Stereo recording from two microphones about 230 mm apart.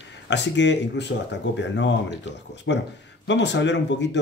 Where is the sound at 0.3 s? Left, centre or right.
Left.